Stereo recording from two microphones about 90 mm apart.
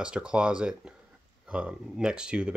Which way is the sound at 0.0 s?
10° right (ahead or behind).